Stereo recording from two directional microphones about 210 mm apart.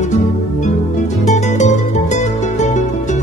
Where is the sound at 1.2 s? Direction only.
35° left (ahead or behind).